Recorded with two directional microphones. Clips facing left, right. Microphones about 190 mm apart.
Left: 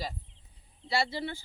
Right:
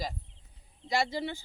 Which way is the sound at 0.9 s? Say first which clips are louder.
Right 1 dB; 15° right (ahead or behind).